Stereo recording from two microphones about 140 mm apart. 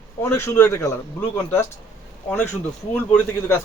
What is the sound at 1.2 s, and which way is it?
Speech, 10° left (ahead or behind).